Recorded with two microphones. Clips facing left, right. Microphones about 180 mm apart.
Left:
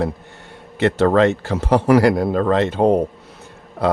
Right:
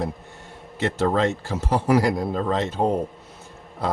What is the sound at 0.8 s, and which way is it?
Speech, 70° left (ahead or behind).